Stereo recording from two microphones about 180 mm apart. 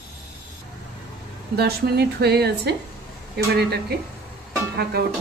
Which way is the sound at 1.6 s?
65° right (ahead or behind).